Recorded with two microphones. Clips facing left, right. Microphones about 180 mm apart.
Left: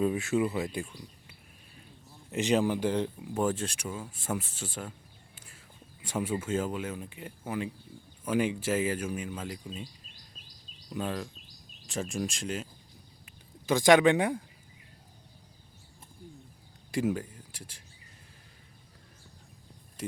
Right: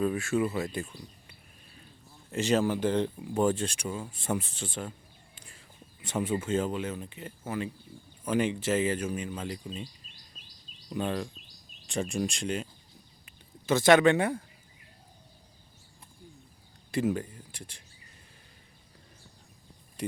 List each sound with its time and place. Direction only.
0.0 s speech: 20° left (ahead or behind)
2.3 s speech: 15° left (ahead or behind)
13.7 s speech: 15° left (ahead or behind)
16.9 s speech: 10° left (ahead or behind)